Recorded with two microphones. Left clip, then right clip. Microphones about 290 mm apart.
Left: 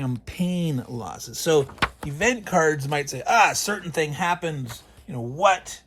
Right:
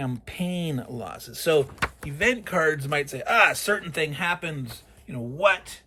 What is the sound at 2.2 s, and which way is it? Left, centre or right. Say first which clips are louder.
Speech: left 2 dB; centre.